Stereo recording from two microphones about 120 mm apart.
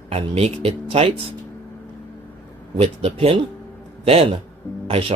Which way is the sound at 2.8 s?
55° right (ahead or behind).